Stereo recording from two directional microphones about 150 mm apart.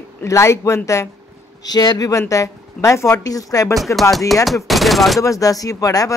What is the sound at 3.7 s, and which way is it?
Speech, centre (ahead or behind).